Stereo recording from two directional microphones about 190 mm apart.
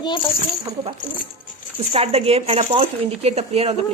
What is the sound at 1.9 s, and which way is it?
Speech, 30° right (ahead or behind).